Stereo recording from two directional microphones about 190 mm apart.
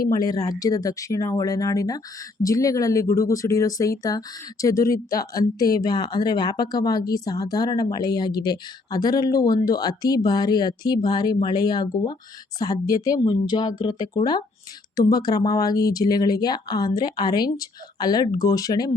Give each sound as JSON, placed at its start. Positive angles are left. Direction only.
{"t": 0.1, "sound": "speech", "side_deg": 20}